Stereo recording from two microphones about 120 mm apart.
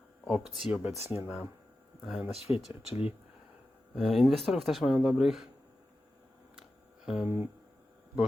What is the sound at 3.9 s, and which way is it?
Speech, centre (ahead or behind).